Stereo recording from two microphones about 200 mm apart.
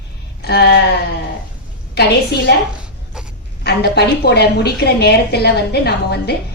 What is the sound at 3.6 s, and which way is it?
A woman's voice, 55° left (ahead or behind).